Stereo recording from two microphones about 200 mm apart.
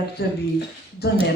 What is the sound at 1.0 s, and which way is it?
Speech, 55° left (ahead or behind).